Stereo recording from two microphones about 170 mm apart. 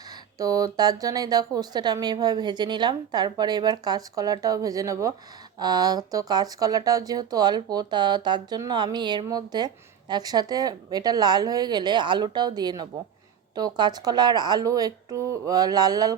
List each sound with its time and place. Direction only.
0.3 s speech: 20° right (ahead or behind)